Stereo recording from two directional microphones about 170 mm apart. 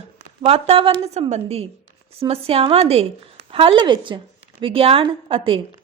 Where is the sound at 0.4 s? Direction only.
35° right (ahead or behind).